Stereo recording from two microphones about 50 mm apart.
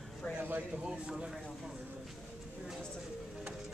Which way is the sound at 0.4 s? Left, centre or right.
Right.